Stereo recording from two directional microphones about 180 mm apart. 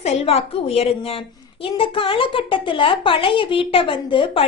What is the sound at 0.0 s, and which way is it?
A woman's voice, 35° left (ahead or behind).